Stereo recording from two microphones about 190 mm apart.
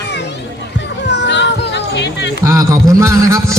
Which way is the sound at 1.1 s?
65° left (ahead or behind).